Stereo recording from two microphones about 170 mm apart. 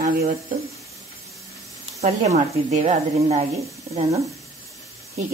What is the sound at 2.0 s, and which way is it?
Speech, 40° right (ahead or behind).